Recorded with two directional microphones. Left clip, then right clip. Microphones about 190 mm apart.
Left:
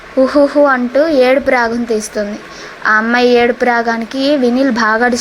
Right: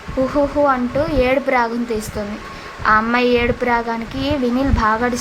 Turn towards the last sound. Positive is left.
turn(degrees=20)  # may be behind; listen again after turning